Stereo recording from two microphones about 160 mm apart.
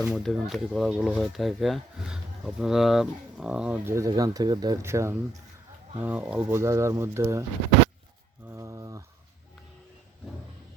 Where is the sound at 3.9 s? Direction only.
20° right (ahead or behind).